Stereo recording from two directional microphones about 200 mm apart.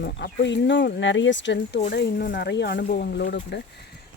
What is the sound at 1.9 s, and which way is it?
Speech, 50° left (ahead or behind).